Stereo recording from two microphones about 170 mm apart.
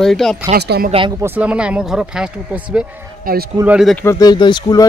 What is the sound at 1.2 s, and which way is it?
Speech, 10° right (ahead or behind).